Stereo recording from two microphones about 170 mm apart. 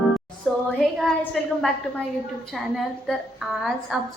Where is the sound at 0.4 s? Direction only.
Centre (ahead or behind).